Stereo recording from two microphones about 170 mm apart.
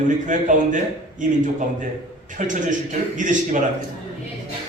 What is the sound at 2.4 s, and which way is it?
A man's voice, 45° right (ahead or behind).